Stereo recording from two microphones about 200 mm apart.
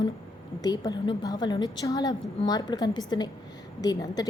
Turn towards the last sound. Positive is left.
turn(degrees=20)  # may be behind; listen again after turning